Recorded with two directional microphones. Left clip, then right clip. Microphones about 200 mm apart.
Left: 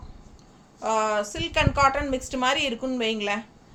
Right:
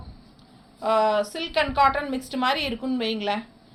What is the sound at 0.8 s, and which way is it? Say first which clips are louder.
A woman's voice: right 3 dB; 20° left (ahead or behind).